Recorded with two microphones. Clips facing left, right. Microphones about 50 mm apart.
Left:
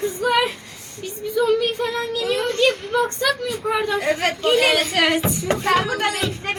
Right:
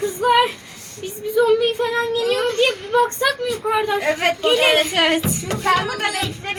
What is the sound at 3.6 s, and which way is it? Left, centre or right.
Speech, centre.